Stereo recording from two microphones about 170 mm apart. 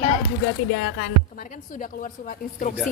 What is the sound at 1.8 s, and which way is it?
Speech, 50° left (ahead or behind).